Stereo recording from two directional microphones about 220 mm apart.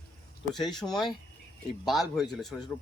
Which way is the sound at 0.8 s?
15° left (ahead or behind).